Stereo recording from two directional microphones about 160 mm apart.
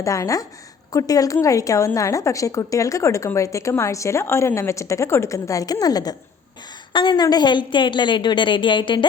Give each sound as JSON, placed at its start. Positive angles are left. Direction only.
{"t": 0.0, "sound": "a woman's voice", "side_deg": 20}